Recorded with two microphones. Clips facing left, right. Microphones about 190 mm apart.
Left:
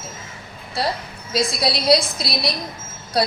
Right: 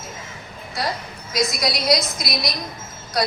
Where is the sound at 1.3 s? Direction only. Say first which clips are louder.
Left 2 dB; 30° left (ahead or behind).